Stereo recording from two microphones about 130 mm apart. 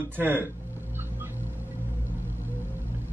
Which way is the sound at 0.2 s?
15° right (ahead or behind).